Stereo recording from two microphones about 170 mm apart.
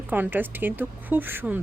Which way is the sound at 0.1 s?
10° right (ahead or behind).